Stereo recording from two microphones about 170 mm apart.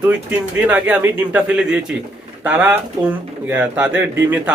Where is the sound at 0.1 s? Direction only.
10° right (ahead or behind).